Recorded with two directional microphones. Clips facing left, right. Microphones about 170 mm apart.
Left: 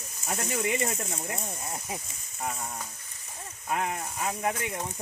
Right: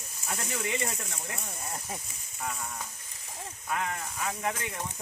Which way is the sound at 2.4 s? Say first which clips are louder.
Left 2 dB; 35° left (ahead or behind).